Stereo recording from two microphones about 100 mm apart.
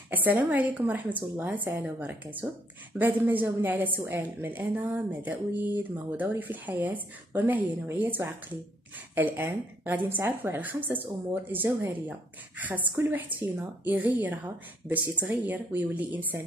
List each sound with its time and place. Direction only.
0.1 s a woman's voice: 15° right (ahead or behind)